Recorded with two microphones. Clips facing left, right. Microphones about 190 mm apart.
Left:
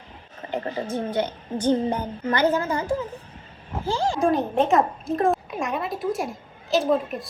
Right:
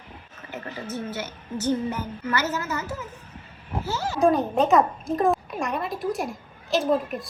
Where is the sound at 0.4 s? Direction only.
30° left (ahead or behind).